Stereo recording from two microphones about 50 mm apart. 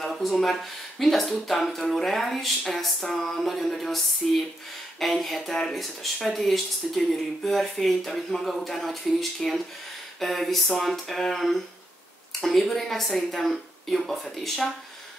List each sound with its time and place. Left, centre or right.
0.0 s speech: centre
11.1 s a sound: centre
12.4 s speech: centre